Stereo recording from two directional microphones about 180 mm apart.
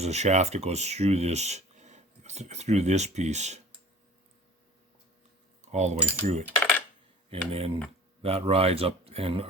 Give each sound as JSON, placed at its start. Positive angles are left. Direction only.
{"t": 0.0, "sound": "speech", "side_deg": -35}
{"t": 5.6, "sound": "speech", "side_deg": -40}
{"t": 6.6, "sound": "coin", "side_deg": 10}
{"t": 7.3, "sound": "speech", "side_deg": -30}